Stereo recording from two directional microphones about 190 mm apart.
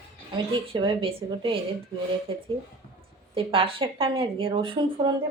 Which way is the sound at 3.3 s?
30° right (ahead or behind).